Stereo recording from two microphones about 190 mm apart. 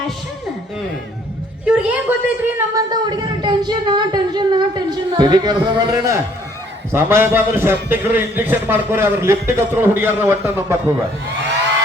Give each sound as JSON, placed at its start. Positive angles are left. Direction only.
{"t": 1.6, "sound": "a man's voice", "side_deg": -5}
{"t": 2.9, "sound": "a man's voice", "side_deg": -20}